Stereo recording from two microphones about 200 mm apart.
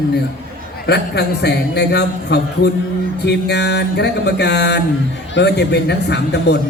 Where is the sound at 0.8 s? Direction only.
55° left (ahead or behind).